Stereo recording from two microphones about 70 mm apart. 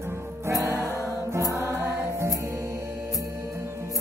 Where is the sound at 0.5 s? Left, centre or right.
Right.